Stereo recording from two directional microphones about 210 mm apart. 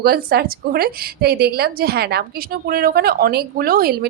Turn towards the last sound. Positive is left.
turn(degrees=-45)  # may be behind; listen again after turning